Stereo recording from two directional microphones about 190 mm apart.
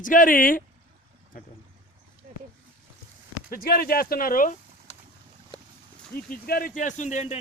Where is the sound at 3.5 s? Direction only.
50° left (ahead or behind).